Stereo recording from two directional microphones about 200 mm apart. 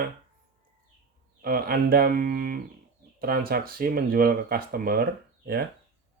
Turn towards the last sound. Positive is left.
turn(degrees=-50)  # may be behind; listen again after turning